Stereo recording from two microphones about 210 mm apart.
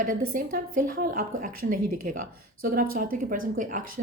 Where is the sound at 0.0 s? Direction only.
40° right (ahead or behind).